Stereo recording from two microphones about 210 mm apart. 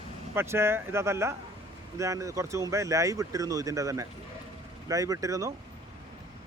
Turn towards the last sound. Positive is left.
turn(degrees=-15)  # may be behind; listen again after turning